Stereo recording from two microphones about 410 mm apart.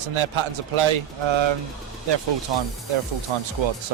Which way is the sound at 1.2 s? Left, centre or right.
Right.